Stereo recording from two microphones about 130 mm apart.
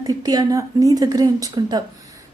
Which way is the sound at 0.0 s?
30° right (ahead or behind).